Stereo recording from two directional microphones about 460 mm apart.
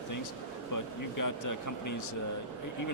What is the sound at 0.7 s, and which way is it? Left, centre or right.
Speech, left.